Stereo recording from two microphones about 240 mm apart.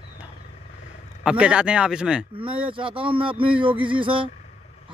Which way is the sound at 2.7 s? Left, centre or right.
Right.